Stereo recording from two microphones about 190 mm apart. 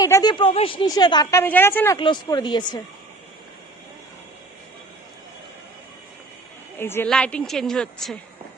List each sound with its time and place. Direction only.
0.0 s a woman's voice: 20° left (ahead or behind)
2.0 s a woman's voice: 25° left (ahead or behind)
6.7 s a woman's voice: 10° left (ahead or behind)